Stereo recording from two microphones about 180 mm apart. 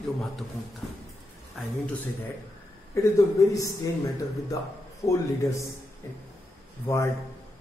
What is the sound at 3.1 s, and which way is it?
Speech, 20° left (ahead or behind).